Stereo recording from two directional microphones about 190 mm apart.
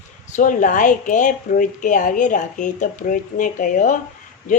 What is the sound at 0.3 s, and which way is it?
Speech, 45° left (ahead or behind).